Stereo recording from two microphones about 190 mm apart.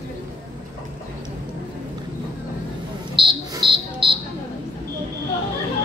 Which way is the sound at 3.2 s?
25° right (ahead or behind).